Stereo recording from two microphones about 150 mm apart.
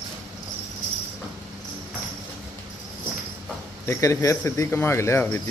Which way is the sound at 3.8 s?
20° left (ahead or behind).